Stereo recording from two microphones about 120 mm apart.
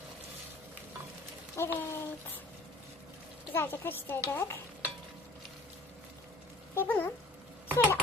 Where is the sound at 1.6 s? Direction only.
20° left (ahead or behind).